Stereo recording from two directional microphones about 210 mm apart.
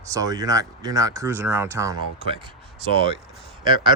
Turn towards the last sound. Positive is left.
turn(degrees=-20)  # may be behind; listen again after turning